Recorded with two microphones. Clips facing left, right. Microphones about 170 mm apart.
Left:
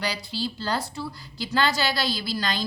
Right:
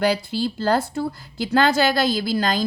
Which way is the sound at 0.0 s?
50° right (ahead or behind).